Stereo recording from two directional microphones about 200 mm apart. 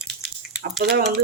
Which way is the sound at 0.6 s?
50° right (ahead or behind).